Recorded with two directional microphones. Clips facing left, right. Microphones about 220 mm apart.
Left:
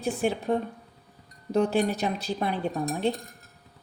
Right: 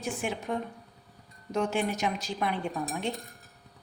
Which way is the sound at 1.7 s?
35° left (ahead or behind).